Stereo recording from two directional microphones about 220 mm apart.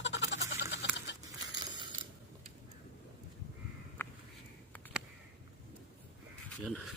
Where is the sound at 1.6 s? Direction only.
20° right (ahead or behind).